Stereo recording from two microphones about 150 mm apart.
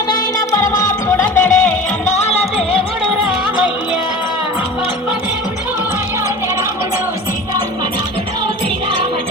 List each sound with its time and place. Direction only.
0.1 s music: 20° left (ahead or behind)
2.0 s music: 45° left (ahead or behind)